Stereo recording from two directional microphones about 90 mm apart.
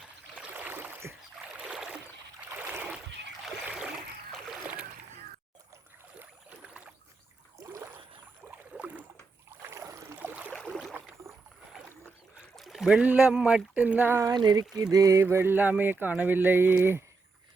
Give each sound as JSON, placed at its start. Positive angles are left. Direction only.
{"t": 0.3, "sound": "rowboat", "side_deg": -15}
{"t": 1.5, "sound": "rowboat", "side_deg": -10}
{"t": 2.5, "sound": "a sound", "side_deg": -20}
{"t": 3.7, "sound": "splash", "side_deg": -10}
{"t": 6.1, "sound": "boat", "side_deg": -15}
{"t": 8.4, "sound": "boat", "side_deg": -20}
{"t": 9.6, "sound": "boat", "side_deg": -35}
{"t": 10.2, "sound": "a sound", "side_deg": -20}
{"t": 10.7, "sound": "rowboat", "side_deg": -5}
{"t": 12.5, "sound": "a sound", "side_deg": 0}
{"t": 13.1, "sound": "speech", "side_deg": -10}
{"t": 14.3, "sound": "speech", "side_deg": -55}
{"t": 14.9, "sound": "speech", "side_deg": -35}